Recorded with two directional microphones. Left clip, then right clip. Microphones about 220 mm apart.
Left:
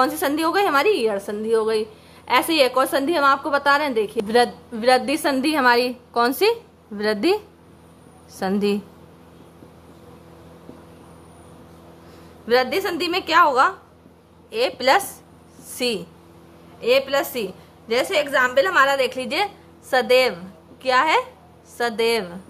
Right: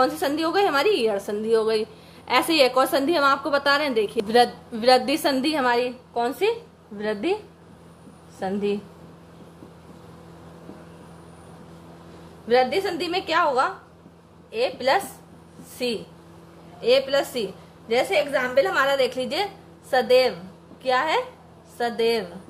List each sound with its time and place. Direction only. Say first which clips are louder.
0.0 s a woman's voice: left 2 dB; 10° left (ahead or behind)
8.4 s a woman's voice: left 4 dB; 20° left (ahead or behind)
12.4 s a woman's voice: left 1 dB; 15° left (ahead or behind)